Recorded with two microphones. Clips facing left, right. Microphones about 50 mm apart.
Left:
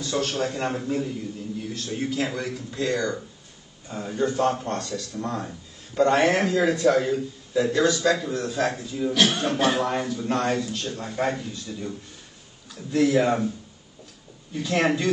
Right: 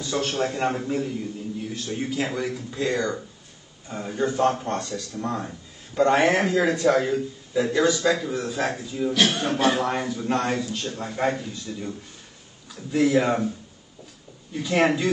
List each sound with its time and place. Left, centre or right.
0.0 s a man's voice: centre
9.8 s a man's voice: centre
12.9 s a man's voice: centre
14.5 s a man's voice: centre